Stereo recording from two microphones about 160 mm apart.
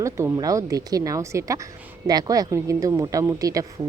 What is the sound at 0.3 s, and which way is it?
Speech, 20° right (ahead or behind).